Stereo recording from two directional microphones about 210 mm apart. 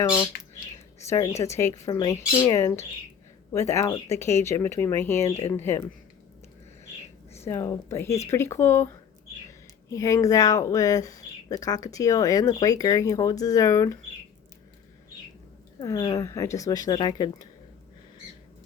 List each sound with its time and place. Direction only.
0.0 s a woman's voice: 10° left (ahead or behind)
7.4 s speech: 15° left (ahead or behind)
9.9 s speech: 15° left (ahead or behind)
15.8 s speech: 20° left (ahead or behind)